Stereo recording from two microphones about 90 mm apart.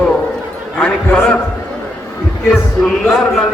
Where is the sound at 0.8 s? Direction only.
10° left (ahead or behind).